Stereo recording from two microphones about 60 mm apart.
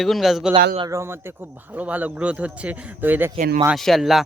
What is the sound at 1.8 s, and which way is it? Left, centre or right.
A man's voice, right.